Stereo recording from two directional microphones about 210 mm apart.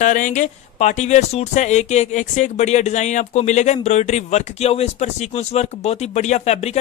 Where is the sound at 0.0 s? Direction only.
40° left (ahead or behind).